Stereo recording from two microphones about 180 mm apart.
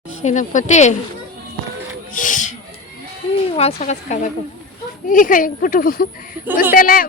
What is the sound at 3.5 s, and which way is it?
A woman's voice, 35° left (ahead or behind).